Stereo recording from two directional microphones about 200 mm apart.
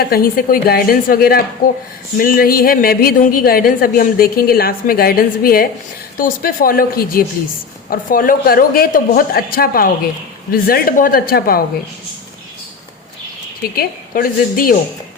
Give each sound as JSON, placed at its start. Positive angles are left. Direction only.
{"t": 0.1, "sound": "a woman's voice", "side_deg": 45}
{"t": 13.6, "sound": "a woman's voice", "side_deg": 50}